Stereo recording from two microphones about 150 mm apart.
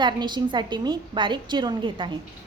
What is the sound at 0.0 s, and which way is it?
A woman's voice, 30° right (ahead or behind).